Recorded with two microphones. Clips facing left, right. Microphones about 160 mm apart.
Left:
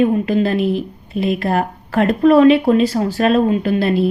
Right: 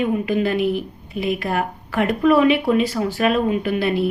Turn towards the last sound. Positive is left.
turn(degrees=35)  # may be behind; listen again after turning